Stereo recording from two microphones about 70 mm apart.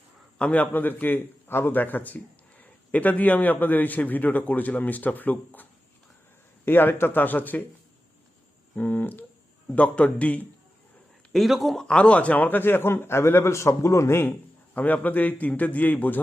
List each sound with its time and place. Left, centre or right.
0.3 s a man's voice: centre
6.7 s a man's voice: left
8.7 s a man's voice: left
11.3 s a man's voice: centre; by 14.3 s left
14.8 s a man's voice: left